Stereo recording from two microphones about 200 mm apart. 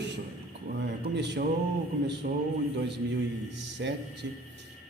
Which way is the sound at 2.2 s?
50° right (ahead or behind).